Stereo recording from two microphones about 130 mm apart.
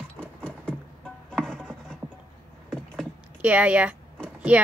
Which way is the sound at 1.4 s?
5° left (ahead or behind).